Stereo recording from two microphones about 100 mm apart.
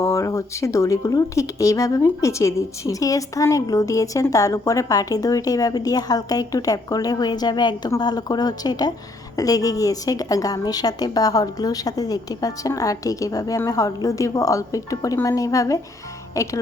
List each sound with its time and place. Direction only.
0.0 s speech: 30° left (ahead or behind)